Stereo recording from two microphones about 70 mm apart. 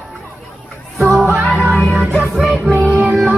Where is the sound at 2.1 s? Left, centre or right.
Centre.